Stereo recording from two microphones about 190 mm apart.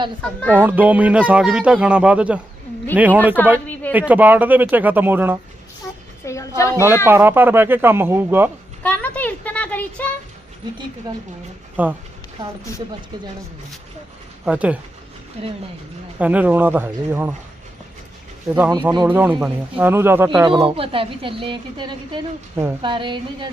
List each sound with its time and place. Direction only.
0.5 s speech: 10° right (ahead or behind)
6.3 s a sound: 15° left (ahead or behind)
6.6 s speech: 15° left (ahead or behind)
6.8 s speech: 10° right (ahead or behind)
8.8 s a sound: 10° left (ahead or behind)
11.8 s speech: 10° right (ahead or behind)
14.4 s speech: 5° right (ahead or behind)
16.1 s speech: 10° right (ahead or behind)
18.4 s speech: 10° right (ahead or behind)
20.5 s a woman's voice: 25° right (ahead or behind)